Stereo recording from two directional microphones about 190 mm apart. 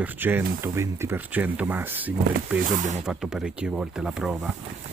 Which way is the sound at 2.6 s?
40° right (ahead or behind).